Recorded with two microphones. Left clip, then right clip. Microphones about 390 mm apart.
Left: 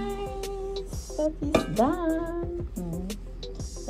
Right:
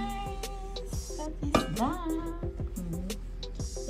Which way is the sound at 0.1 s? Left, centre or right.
Centre.